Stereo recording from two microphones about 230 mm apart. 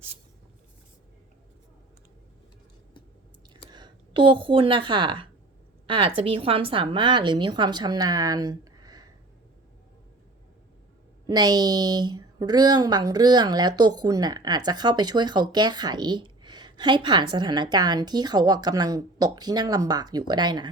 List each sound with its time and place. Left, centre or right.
3.7 s a woman's voice: centre
11.3 s speech: centre